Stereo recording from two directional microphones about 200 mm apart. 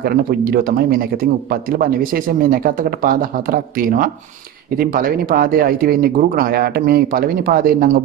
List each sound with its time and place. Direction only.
0.0 s speech: 50° right (ahead or behind)